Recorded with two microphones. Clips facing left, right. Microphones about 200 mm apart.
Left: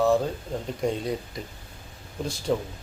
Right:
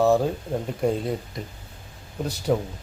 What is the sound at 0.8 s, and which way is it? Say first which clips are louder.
Speech: right 3 dB; 5° right (ahead or behind).